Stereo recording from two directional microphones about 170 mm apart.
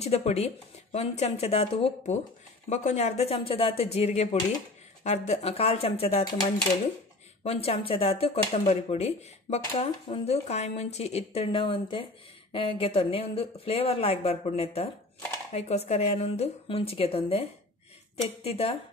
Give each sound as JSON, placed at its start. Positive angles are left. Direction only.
{"t": 0.0, "sound": "speech", "side_deg": 40}
{"t": 7.4, "sound": "speech", "side_deg": 35}